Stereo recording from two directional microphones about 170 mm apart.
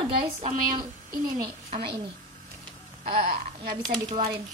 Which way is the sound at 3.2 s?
60° right (ahead or behind).